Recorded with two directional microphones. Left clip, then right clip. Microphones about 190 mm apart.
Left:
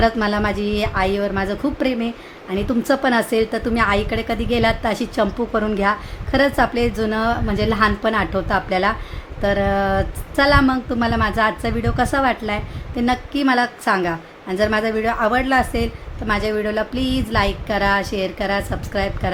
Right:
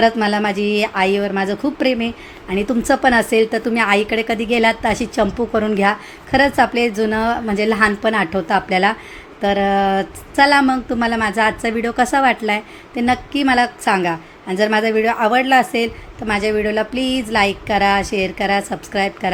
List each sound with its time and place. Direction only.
0.0 s a woman's voice: 10° right (ahead or behind)